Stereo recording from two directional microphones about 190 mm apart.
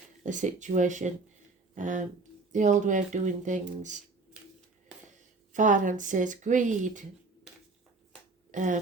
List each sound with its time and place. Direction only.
0.2 s speech: 40° right (ahead or behind)
5.5 s speech: 40° right (ahead or behind)
8.5 s speech: 40° right (ahead or behind)